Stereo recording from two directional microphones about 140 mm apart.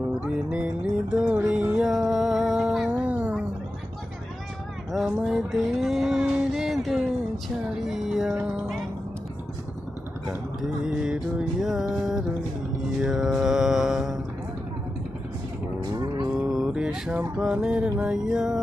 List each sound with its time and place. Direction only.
1.1 s music: 10° right (ahead or behind)
4.9 s a sound: centre (ahead or behind)
7.5 s music: centre (ahead or behind)
10.2 s music: 5° right (ahead or behind)
15.8 s cattle: 30° right (ahead or behind)
16.4 s music: 5° right (ahead or behind)